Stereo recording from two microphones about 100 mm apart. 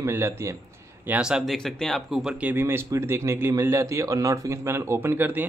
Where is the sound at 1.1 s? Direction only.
10° right (ahead or behind).